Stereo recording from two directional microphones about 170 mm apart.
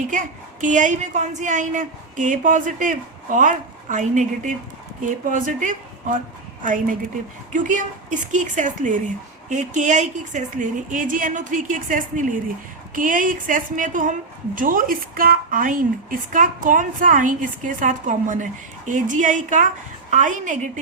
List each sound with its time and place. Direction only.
0.6 s a woman's voice: 50° right (ahead or behind)